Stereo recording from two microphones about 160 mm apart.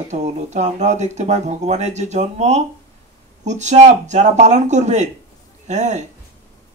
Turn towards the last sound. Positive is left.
turn(degrees=-45)  # may be behind; listen again after turning